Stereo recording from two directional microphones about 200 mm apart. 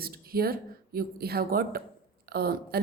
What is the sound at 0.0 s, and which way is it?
A woman's voice, 50° right (ahead or behind).